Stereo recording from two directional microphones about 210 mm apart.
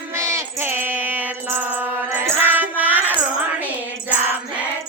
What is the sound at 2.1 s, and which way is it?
Music, 10° right (ahead or behind).